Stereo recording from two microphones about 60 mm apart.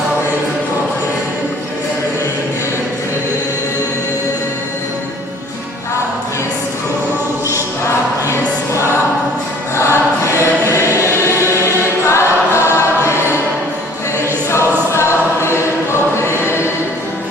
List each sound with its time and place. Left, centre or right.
9.9 s choir: right
11.2 s choir: left
12.5 s choir: right